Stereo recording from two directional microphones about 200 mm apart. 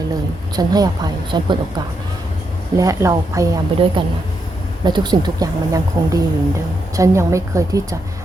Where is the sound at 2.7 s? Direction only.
15° right (ahead or behind).